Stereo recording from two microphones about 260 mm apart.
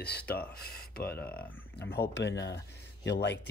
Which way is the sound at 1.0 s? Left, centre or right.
Centre.